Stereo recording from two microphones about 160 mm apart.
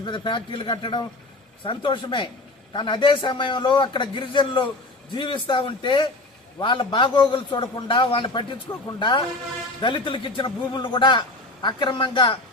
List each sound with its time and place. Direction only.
0.0 s a man's voice: 30° left (ahead or behind)